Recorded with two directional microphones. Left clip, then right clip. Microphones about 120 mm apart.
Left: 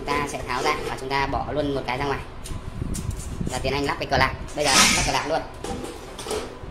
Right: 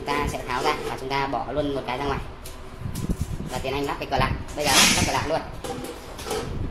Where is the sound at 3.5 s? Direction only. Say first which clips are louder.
Left 2 dB; 20° left (ahead or behind).